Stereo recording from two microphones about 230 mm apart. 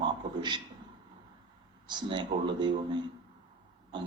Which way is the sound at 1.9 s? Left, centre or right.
Centre.